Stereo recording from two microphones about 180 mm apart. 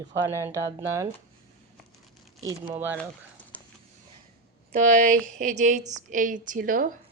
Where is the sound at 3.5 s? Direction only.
10° left (ahead or behind).